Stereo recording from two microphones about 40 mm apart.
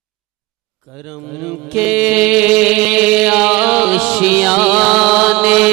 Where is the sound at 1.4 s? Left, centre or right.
Centre.